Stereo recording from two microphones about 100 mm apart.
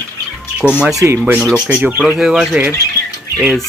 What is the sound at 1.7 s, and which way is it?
Boiling, 15° right (ahead or behind).